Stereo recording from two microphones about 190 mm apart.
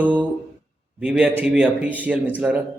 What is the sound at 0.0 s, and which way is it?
A man's voice, 5° right (ahead or behind).